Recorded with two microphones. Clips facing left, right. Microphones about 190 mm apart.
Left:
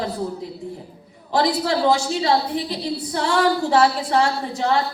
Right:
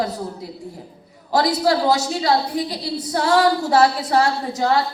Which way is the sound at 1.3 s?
40° right (ahead or behind).